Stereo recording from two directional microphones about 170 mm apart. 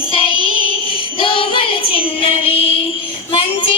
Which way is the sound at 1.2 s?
30° left (ahead or behind).